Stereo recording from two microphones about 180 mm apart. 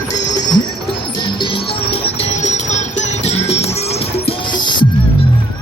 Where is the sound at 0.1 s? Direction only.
25° left (ahead or behind).